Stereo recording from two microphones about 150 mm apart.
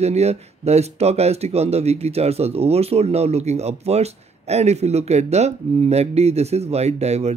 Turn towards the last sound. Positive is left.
turn(degrees=-45)  # may be behind; listen again after turning